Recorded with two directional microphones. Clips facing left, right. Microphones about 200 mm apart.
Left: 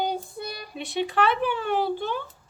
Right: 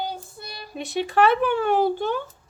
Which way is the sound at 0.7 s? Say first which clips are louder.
Right 3 dB; 45° right (ahead or behind).